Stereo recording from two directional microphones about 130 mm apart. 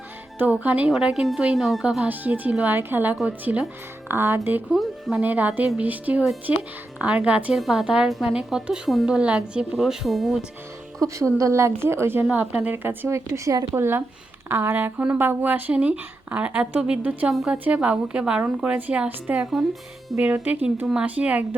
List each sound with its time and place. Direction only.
0.3 s speech: 15° right (ahead or behind)
2.0 s speech: 15° right (ahead or behind)
4.7 s a woman's voice: centre (ahead or behind)
5.2 s a woman's voice: 15° right (ahead or behind)
11.0 s speech: 25° right (ahead or behind); by 21.4 s 10° right (ahead or behind)